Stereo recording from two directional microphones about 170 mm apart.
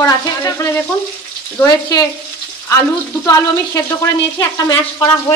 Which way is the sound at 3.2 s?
15° left (ahead or behind).